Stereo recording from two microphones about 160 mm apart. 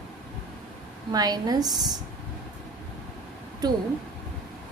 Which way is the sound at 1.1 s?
25° right (ahead or behind).